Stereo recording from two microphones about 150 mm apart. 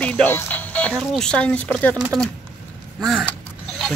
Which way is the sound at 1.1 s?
5° left (ahead or behind).